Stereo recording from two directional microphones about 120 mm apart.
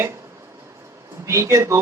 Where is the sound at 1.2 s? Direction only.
25° right (ahead or behind).